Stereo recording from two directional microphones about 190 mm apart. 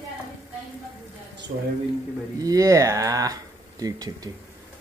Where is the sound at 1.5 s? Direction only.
50° right (ahead or behind).